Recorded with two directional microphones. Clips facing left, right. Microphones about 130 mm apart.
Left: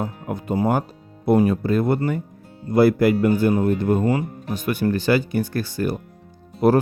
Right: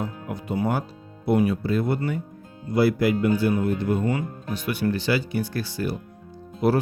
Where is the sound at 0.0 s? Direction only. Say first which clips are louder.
Left 3 dB; 50° left (ahead or behind).